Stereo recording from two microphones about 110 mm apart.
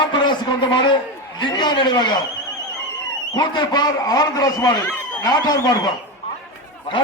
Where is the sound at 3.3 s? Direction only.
40° left (ahead or behind).